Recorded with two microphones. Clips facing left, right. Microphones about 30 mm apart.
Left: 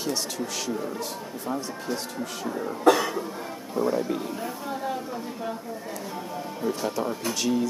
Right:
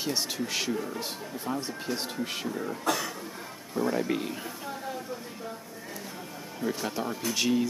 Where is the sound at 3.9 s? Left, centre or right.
Right.